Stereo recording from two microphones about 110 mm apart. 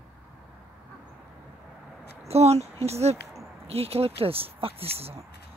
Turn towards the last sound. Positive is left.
turn(degrees=-65)  # may be behind; listen again after turning